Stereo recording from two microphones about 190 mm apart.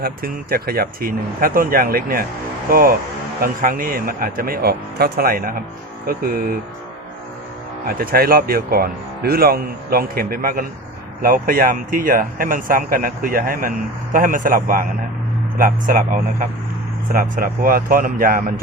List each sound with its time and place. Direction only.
0.0 s speech: 55° right (ahead or behind)
7.9 s speech: 50° right (ahead or behind)